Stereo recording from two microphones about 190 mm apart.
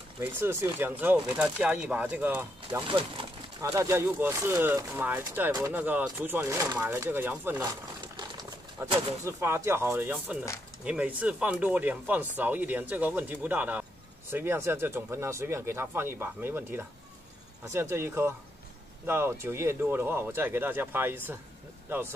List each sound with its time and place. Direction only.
0.2 s speech: 15° right (ahead or behind)
2.8 s speech: 25° right (ahead or behind); by 7.6 s 10° right (ahead or behind)
8.8 s speech: 25° right (ahead or behind)
9.4 s speech: 15° right (ahead or behind)